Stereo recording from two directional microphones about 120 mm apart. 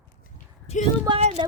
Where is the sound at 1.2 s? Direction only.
70° right (ahead or behind).